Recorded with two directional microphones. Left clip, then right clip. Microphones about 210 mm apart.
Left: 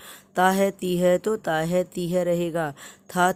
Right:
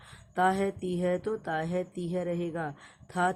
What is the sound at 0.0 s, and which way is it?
Speech, 50° left (ahead or behind).